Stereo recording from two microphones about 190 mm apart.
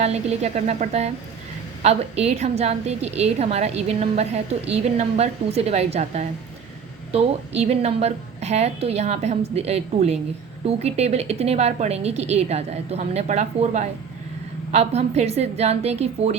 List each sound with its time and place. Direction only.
0.0 s a woman's voice: 35° right (ahead or behind)